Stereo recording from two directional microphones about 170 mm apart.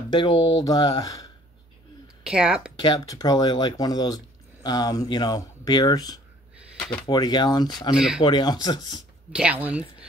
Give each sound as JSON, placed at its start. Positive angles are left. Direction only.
{"t": 0.1, "sound": "speech", "side_deg": 25}
{"t": 2.2, "sound": "speech", "side_deg": -5}
{"t": 2.8, "sound": "speech", "side_deg": 25}
{"t": 7.9, "sound": "speech", "side_deg": -5}
{"t": 8.2, "sound": "speech", "side_deg": 25}
{"t": 9.3, "sound": "speech", "side_deg": -5}